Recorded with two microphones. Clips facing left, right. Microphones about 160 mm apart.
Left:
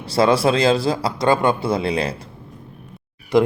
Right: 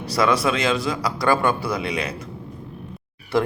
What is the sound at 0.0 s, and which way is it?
Speech, 30° left (ahead or behind).